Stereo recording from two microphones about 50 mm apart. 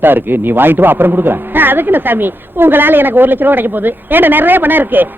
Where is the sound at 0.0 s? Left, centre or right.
Right.